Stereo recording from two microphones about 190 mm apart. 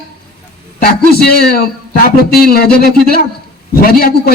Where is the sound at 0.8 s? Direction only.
55° left (ahead or behind).